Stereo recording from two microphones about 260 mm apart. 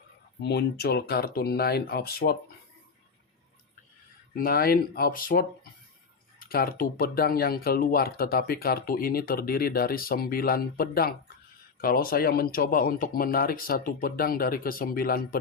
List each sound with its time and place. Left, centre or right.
0.4 s speech: left
4.4 s speech: left